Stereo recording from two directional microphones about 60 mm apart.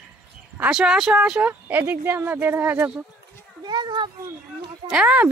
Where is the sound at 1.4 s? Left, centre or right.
Right.